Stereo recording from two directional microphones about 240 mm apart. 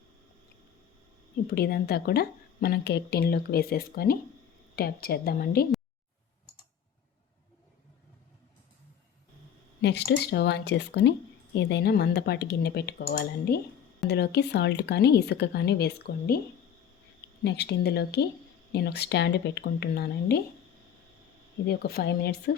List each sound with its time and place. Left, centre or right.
1.5 s speech: left
9.8 s speech: left
17.4 s speech: left
21.7 s speech: left